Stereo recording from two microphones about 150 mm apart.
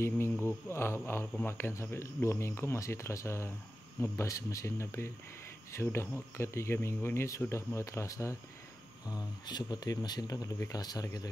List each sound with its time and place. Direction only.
0.0 s speech: 15° left (ahead or behind)